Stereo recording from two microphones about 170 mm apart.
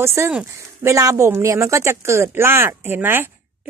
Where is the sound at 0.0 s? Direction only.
15° right (ahead or behind).